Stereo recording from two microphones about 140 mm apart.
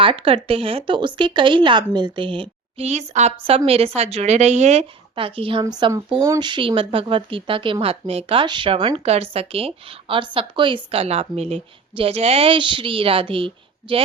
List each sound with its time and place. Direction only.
0.0 s a woman's voice: 40° right (ahead or behind)
5.6 s a woman's voice: 30° right (ahead or behind)
10.9 s a woman's voice: 45° right (ahead or behind)